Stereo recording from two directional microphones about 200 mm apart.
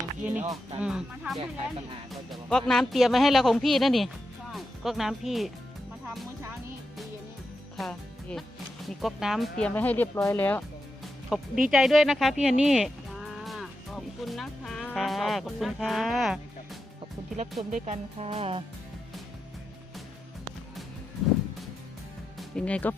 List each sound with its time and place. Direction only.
0.3 s speech: 10° right (ahead or behind)
7.8 s speech: centre (ahead or behind)
11.0 s music: 5° right (ahead or behind)
11.7 s speech: centre (ahead or behind)
17.6 s speech: 35° right (ahead or behind)
22.4 s speech: 5° left (ahead or behind)